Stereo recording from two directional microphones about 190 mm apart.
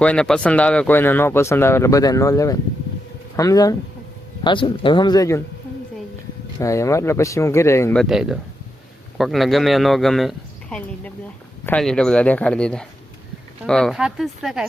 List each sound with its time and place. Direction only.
0.0 s speech: 5° left (ahead or behind)
6.6 s speech: 15° left (ahead or behind)
7.9 s speech: centre (ahead or behind)